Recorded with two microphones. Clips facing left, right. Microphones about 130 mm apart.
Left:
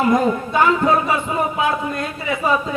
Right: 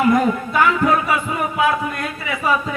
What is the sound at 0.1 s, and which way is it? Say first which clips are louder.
Speech: even; 25° left (ahead or behind).